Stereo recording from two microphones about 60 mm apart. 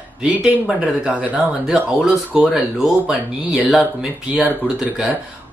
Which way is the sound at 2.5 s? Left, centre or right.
Centre.